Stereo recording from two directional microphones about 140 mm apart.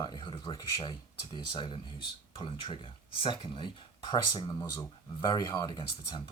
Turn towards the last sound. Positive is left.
turn(degrees=30)  # may be behind; listen again after turning